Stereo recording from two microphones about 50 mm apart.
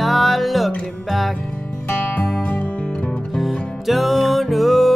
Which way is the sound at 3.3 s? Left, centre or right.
Centre.